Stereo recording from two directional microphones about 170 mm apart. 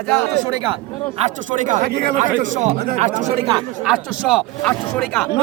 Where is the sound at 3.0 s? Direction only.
45° right (ahead or behind).